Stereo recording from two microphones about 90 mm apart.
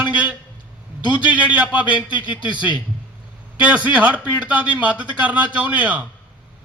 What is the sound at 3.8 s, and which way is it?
A man's voice, 15° right (ahead or behind).